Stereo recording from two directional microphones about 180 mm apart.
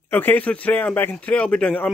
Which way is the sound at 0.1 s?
10° left (ahead or behind).